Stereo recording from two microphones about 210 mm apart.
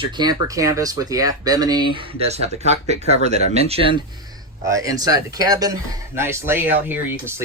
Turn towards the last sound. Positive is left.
turn(degrees=-10)  # may be behind; listen again after turning